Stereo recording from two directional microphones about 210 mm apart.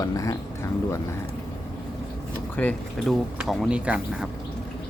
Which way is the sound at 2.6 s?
5° left (ahead or behind).